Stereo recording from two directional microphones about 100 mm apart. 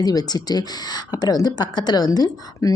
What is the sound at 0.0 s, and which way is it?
A woman's voice, 40° left (ahead or behind).